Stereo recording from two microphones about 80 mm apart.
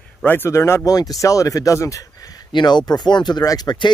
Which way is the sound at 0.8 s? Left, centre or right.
Left.